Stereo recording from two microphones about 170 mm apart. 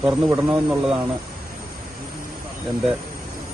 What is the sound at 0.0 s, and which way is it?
Speech, 5° right (ahead or behind).